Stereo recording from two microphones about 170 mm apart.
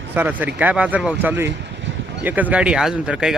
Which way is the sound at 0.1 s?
10° right (ahead or behind).